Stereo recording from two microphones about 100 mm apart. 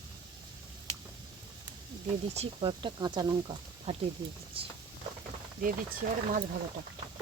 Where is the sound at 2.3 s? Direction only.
75° right (ahead or behind); by 3.6 s 50° right (ahead or behind).